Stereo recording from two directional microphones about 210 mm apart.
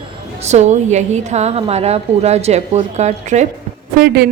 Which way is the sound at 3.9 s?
50° right (ahead or behind).